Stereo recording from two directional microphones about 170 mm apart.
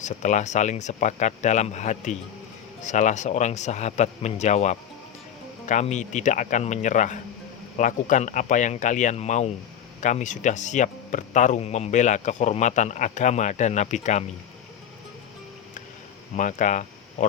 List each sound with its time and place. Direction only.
0.0 s speech: 45° left (ahead or behind)
16.4 s speech: 45° left (ahead or behind)